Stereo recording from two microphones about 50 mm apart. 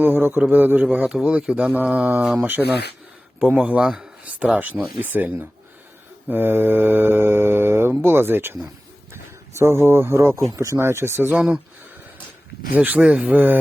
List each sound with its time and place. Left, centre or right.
0.0 s speech: right
1.3 s speech: right
1.7 s speech: right
2.2 s speech: centre
2.5 s speech: right
3.4 s speech: right
4.5 s speech: right
6.2 s mantra: right
9.1 s speech: right
10.6 s speech: right
10.8 s speech: right
11.3 s speech: right
12.7 s speech: right